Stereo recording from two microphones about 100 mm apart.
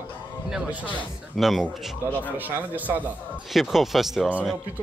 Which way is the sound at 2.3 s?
15° right (ahead or behind).